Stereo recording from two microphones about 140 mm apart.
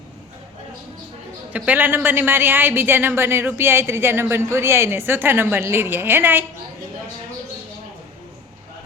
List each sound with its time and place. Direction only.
1.5 s speech: 10° right (ahead or behind)